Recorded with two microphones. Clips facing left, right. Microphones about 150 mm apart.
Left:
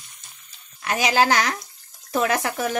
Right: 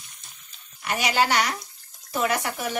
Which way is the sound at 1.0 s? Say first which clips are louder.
Left 3 dB; 90° left.